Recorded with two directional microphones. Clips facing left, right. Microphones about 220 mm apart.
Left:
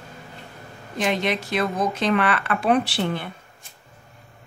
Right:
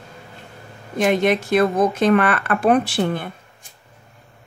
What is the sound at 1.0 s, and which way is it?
Speech, 50° right (ahead or behind).